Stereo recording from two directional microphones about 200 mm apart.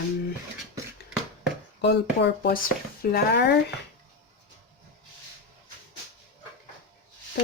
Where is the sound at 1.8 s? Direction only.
55° left (ahead or behind).